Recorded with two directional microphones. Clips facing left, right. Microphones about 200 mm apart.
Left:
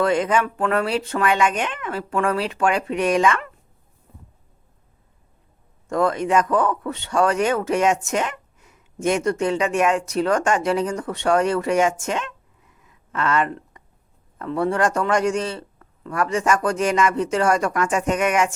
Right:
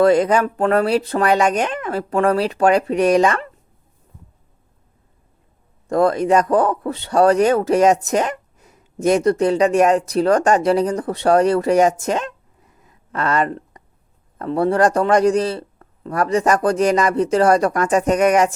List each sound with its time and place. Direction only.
0.0 s a man's voice: 35° right (ahead or behind)
5.9 s a man's voice: 35° right (ahead or behind)
12.8 s a sound: 40° right (ahead or behind)
14.3 s a man's voice: 35° right (ahead or behind)